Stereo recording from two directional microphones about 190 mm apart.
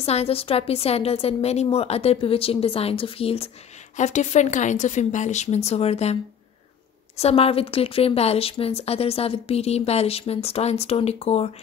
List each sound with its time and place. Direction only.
0.0 s a woman's voice: 35° left (ahead or behind)
7.2 s a woman's voice: 30° left (ahead or behind)